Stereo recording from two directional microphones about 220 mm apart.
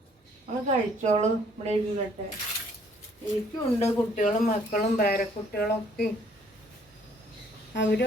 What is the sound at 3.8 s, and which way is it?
A woman's voice, 35° left (ahead or behind).